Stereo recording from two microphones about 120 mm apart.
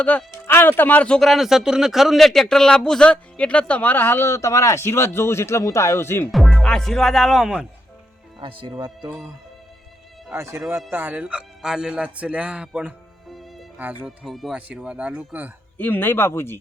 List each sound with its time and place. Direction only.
0.0 s speech: 10° left (ahead or behind)
6.3 s speech: centre (ahead or behind)
8.4 s speech: 45° right (ahead or behind)
10.3 s speech: 25° right (ahead or behind)
14.0 s speech: centre (ahead or behind)
15.8 s speech: 15° left (ahead or behind)